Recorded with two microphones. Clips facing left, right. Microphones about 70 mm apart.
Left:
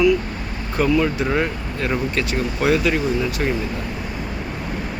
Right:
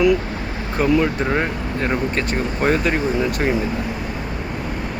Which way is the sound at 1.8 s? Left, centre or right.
Right.